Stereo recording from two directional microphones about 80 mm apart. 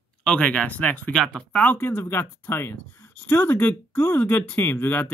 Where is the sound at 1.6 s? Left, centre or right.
Left.